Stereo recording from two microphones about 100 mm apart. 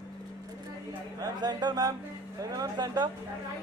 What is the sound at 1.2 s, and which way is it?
Speech, 45° right (ahead or behind).